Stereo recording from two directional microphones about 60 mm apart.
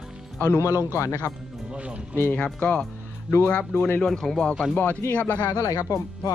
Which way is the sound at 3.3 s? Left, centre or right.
Left.